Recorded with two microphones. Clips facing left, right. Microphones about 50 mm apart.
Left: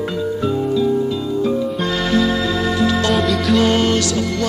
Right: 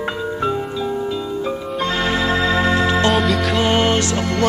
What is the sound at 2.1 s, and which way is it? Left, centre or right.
Music, right.